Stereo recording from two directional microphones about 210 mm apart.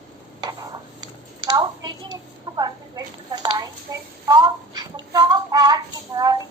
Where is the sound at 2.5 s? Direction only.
20° right (ahead or behind).